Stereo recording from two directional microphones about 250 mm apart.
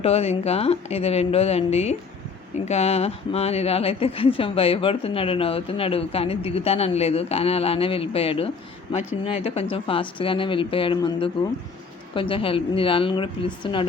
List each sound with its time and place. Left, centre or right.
0.0 s speech: left